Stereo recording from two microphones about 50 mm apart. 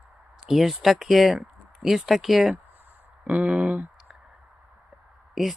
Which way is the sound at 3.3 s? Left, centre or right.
Right.